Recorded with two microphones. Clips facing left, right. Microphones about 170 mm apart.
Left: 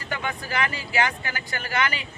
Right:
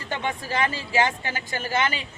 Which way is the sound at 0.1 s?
25° right (ahead or behind).